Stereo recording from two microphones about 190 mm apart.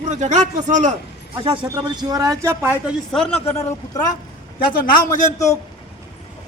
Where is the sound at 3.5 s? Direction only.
15° left (ahead or behind).